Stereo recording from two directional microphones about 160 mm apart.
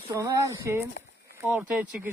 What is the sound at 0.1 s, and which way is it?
Speech, 20° right (ahead or behind).